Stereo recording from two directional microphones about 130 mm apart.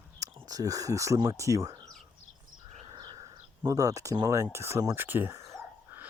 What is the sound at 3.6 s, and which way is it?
Speech, 25° right (ahead or behind).